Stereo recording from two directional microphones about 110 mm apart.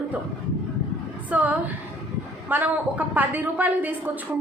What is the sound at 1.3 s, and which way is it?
A woman's voice, 10° right (ahead or behind).